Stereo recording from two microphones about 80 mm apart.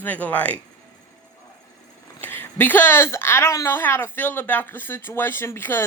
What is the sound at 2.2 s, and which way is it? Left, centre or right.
A woman's voice, left.